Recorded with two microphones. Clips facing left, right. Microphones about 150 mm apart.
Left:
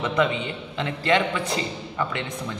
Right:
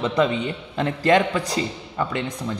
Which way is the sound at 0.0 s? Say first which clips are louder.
Right 2 dB; 35° right (ahead or behind).